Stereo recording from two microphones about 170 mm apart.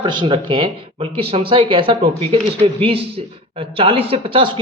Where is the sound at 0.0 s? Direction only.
25° right (ahead or behind).